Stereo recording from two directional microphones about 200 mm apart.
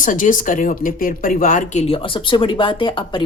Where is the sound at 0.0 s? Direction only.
40° left (ahead or behind).